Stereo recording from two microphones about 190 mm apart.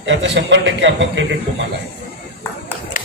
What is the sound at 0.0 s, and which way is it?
A man's voice, 70° right (ahead or behind).